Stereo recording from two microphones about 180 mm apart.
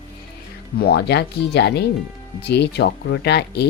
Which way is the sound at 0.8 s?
65° left (ahead or behind).